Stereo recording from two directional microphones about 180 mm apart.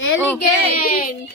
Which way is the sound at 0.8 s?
55° left (ahead or behind).